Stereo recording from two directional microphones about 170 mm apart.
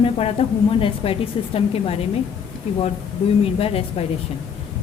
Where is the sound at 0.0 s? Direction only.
35° left (ahead or behind).